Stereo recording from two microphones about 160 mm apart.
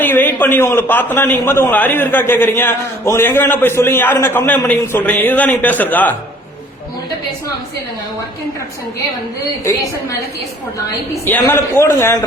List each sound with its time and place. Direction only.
0.0 s a man's voice: 10° left (ahead or behind)
9.6 s a woman's voice: 20° left (ahead or behind)
11.3 s a man's voice: 15° left (ahead or behind)